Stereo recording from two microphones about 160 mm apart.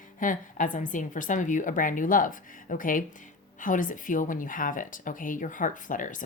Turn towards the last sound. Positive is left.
turn(degrees=55)  # may be behind; listen again after turning